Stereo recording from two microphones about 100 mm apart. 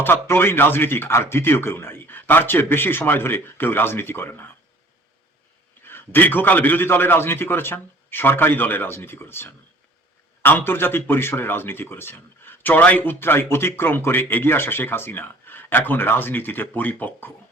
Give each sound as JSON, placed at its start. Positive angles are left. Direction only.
{"t": 0.0, "sound": "speech", "side_deg": 20}
{"t": 5.9, "sound": "speech", "side_deg": 20}